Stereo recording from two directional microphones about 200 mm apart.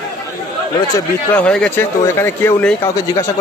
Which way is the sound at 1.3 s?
5° left (ahead or behind).